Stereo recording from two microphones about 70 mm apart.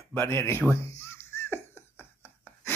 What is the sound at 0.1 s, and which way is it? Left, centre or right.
Speech, left.